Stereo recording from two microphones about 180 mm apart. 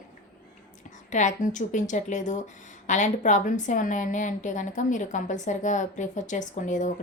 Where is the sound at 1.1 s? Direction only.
45° left (ahead or behind).